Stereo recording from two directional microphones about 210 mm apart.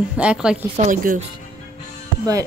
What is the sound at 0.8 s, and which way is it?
Speech, 35° right (ahead or behind).